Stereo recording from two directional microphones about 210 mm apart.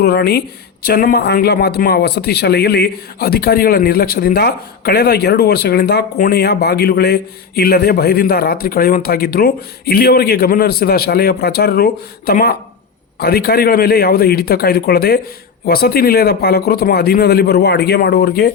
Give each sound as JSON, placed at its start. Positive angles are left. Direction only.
{"t": 0.0, "sound": "speech", "side_deg": 50}